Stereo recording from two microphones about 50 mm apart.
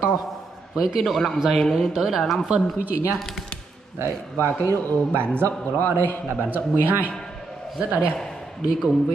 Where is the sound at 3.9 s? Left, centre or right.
Right.